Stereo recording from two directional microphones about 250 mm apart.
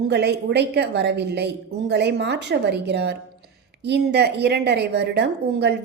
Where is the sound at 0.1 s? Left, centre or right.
Right.